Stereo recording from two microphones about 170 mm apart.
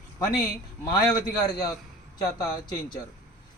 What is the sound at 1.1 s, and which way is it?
A man's voice, 25° left (ahead or behind).